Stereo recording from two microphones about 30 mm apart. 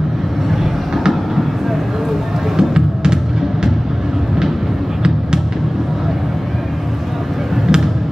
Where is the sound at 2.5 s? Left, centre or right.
Right.